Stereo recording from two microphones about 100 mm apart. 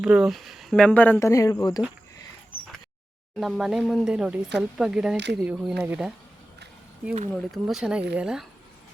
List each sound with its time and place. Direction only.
0.0 s speech: 5° right (ahead or behind)
0.8 s speech: 15° left (ahead or behind)
1.2 s speech: 35° left (ahead or behind)
3.3 s speech: centre (ahead or behind)
7.3 s speech: centre (ahead or behind)